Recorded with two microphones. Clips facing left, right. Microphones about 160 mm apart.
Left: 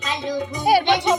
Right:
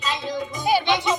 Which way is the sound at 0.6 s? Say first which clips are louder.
Left 4 dB; 65° left (ahead or behind).